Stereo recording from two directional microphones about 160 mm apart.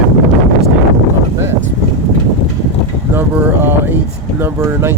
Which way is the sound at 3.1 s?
10° right (ahead or behind).